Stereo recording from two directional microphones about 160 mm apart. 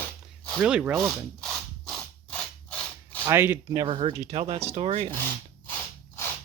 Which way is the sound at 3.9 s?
35° right (ahead or behind).